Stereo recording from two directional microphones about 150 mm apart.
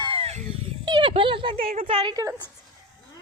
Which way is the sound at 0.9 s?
30° right (ahead or behind).